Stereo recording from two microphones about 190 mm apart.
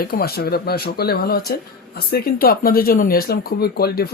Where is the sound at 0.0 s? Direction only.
55° left (ahead or behind).